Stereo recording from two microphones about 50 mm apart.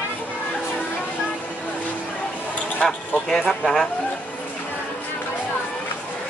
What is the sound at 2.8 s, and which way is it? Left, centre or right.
Speech, centre.